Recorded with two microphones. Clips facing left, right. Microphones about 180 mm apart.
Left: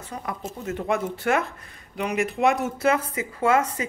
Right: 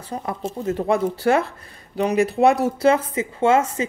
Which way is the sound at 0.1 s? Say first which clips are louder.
Right 6 dB; 30° right (ahead or behind).